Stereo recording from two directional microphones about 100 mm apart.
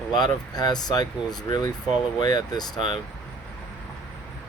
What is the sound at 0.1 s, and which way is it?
Speech, 40° left (ahead or behind).